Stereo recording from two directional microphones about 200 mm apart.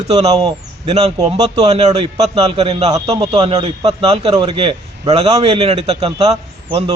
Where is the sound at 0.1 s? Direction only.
30° right (ahead or behind).